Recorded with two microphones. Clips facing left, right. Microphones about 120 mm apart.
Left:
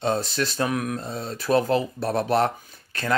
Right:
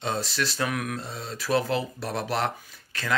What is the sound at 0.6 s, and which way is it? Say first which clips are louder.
Speech: left 5 dB; 30° left (ahead or behind).